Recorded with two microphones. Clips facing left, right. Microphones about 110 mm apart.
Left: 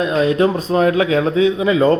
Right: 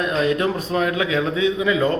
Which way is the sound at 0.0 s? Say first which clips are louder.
Left 5 dB; 30° left (ahead or behind).